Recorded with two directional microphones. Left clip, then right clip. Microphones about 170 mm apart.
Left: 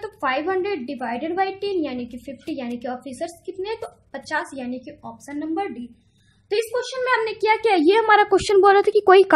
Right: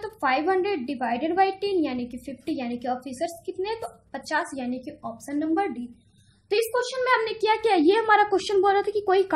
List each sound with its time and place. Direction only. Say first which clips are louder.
0.0 s a woman's voice: left 1 dB; 15° left (ahead or behind); by 9.2 s 35° left (ahead or behind)